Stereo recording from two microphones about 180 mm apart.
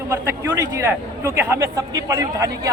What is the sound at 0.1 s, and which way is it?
A man's voice, 15° right (ahead or behind).